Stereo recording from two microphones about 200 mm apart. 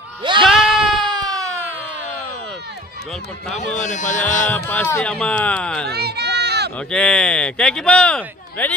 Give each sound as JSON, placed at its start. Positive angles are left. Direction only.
{"t": 0.2, "sound": "speech", "side_deg": -25}
{"t": 0.5, "sound": "sheep", "side_deg": 0}
{"t": 1.3, "sound": "a sound", "side_deg": -15}
{"t": 3.5, "sound": "speech", "side_deg": 35}
{"t": 4.5, "sound": "speech", "side_deg": 10}
{"t": 5.9, "sound": "a sound", "side_deg": -55}
{"t": 6.9, "sound": "speech", "side_deg": 5}